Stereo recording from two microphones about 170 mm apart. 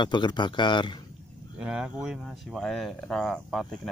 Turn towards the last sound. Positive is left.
turn(degrees=0)  # may be behind; listen again after turning